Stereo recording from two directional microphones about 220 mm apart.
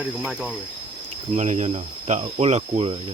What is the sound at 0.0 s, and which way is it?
Speech, 5° right (ahead or behind).